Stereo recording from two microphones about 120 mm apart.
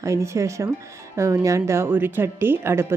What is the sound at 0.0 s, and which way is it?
Speech, 25° right (ahead or behind).